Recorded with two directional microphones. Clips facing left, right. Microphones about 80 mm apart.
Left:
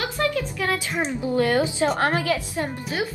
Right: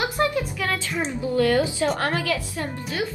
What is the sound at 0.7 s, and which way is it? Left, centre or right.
A woman's voice, left.